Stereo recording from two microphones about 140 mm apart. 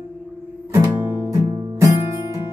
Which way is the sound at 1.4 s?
35° right (ahead or behind).